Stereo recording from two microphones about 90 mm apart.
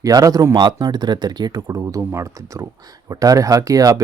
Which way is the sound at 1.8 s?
35° right (ahead or behind).